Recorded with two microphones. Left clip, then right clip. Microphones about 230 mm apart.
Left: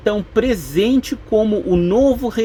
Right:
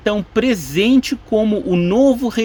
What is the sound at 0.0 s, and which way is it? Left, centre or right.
Speech, right.